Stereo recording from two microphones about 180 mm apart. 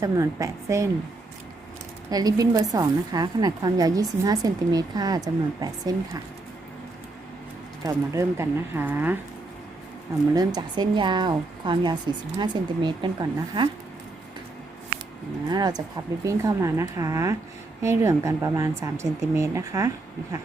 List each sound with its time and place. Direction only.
0.0 s a woman's voice: 15° right (ahead or behind)
2.0 s a woman's voice: 20° right (ahead or behind)
7.9 s a woman's voice: 15° right (ahead or behind)
10.3 s a woman's voice: 20° right (ahead or behind)
15.4 s a woman's voice: 20° right (ahead or behind)